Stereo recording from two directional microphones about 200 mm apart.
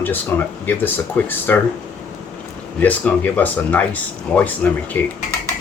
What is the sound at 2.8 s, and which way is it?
Speech, 10° left (ahead or behind).